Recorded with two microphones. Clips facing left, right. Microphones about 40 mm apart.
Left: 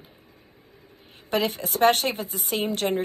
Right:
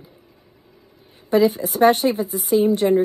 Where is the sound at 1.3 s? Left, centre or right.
Left.